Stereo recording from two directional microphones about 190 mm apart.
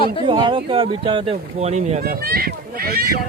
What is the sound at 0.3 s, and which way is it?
Speech, 25° right (ahead or behind).